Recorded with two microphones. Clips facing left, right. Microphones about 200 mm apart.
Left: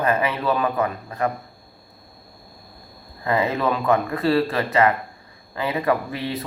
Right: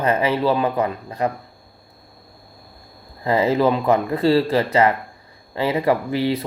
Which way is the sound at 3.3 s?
25° right (ahead or behind).